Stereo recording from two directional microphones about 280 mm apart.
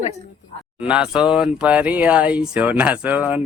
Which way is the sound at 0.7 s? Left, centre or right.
Centre.